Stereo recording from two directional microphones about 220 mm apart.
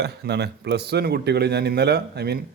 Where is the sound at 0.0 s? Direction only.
50° right (ahead or behind).